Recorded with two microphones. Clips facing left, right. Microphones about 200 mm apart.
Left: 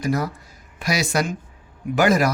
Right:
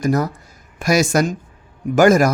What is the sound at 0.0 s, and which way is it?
Speech, 45° right (ahead or behind).